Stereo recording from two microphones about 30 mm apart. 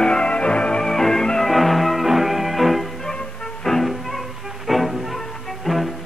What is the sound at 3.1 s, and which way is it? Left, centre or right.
Music, left.